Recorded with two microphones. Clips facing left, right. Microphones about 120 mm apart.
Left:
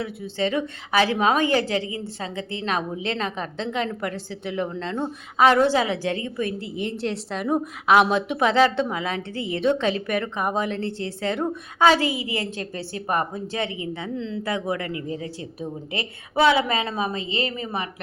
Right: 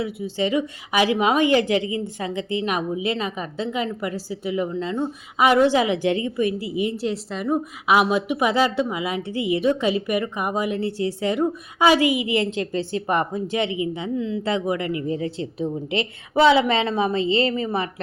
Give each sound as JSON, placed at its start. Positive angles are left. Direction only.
{"t": 0.0, "sound": "a woman's voice", "side_deg": -10}